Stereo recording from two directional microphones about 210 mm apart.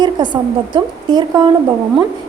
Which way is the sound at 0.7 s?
25° right (ahead or behind).